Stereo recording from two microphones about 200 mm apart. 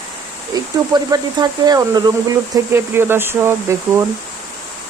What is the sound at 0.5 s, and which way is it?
Speech, 20° right (ahead or behind).